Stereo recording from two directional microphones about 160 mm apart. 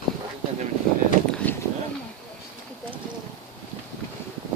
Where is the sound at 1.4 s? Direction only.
10° left (ahead or behind).